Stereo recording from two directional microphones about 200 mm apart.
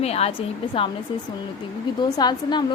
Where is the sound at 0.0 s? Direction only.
30° left (ahead or behind).